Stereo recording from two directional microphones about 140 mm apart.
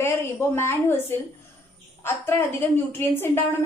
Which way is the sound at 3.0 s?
15° left (ahead or behind).